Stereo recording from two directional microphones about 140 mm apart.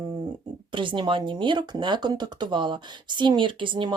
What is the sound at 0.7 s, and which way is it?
Speech, 35° right (ahead or behind).